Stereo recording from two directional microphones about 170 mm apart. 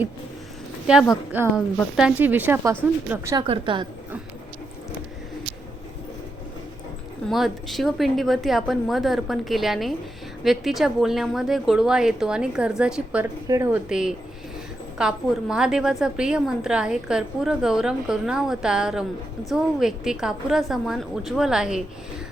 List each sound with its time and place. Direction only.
0.9 s a woman's voice: 5° right (ahead or behind)
3.3 s a woman's voice: 30° right (ahead or behind)
7.3 s a woman's voice: centre (ahead or behind)